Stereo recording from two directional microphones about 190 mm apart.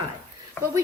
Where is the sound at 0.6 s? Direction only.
10° left (ahead or behind).